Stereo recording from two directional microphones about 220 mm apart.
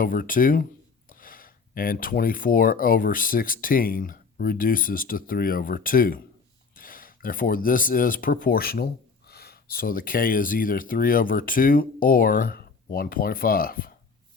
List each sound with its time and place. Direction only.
0.0 s speech: 40° left (ahead or behind)